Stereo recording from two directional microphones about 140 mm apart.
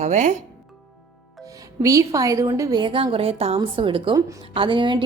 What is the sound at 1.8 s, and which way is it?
A woman's voice, 25° right (ahead or behind).